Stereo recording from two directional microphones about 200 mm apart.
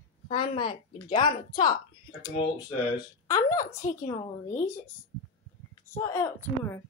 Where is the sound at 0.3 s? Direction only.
25° left (ahead or behind).